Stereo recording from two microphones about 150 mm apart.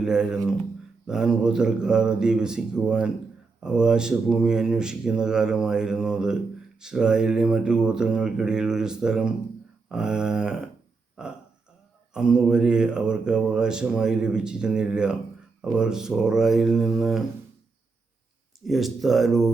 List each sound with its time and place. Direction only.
0.0 s speech: 5° right (ahead or behind)
18.6 s speech: centre (ahead or behind)